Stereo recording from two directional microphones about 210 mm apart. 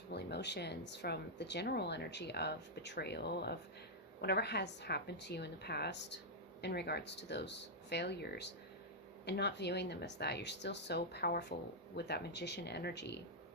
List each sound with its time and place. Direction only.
0.1 s speech: 50° left (ahead or behind)